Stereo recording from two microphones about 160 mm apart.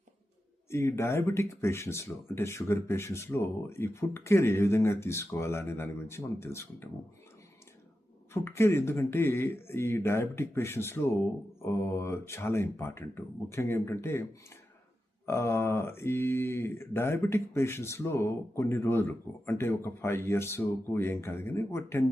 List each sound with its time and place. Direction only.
0.7 s speech: 15° left (ahead or behind)
8.3 s speech: 15° left (ahead or behind)
15.3 s speech: 15° left (ahead or behind)